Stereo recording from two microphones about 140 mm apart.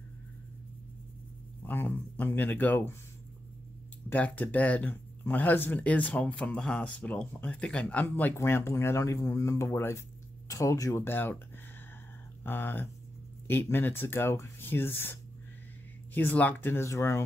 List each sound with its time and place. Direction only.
1.6 s speech: 15° left (ahead or behind)
4.1 s speech: 10° left (ahead or behind)
12.4 s speech: 15° left (ahead or behind)